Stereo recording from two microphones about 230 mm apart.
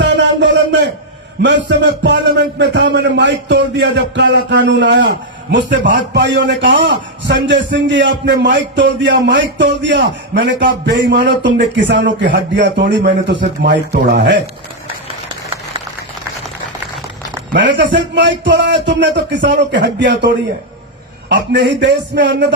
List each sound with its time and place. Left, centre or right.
0.0 s a sound: right
1.4 s a man's voice: right
17.5 s a man's voice: right
21.5 s a man's voice: right